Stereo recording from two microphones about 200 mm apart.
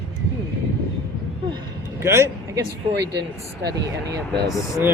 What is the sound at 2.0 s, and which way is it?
Speech, 15° right (ahead or behind).